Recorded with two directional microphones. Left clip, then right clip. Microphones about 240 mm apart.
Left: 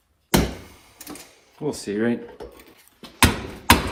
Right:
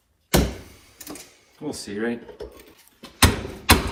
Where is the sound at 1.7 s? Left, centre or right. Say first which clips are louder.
Left 3 dB; left.